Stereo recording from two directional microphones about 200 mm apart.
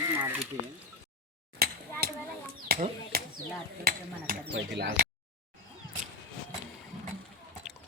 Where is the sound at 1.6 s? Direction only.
50° right (ahead or behind).